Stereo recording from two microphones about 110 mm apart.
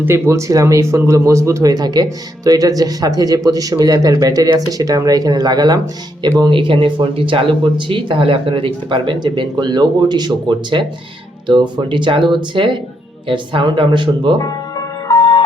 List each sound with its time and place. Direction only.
0.0 s speech: 25° right (ahead or behind)
6.4 s speech: 50° right (ahead or behind)
15.2 s music: 50° left (ahead or behind)